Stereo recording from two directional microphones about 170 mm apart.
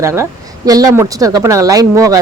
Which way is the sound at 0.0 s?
15° right (ahead or behind).